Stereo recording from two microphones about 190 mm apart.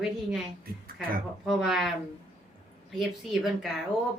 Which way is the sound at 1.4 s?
Centre (ahead or behind).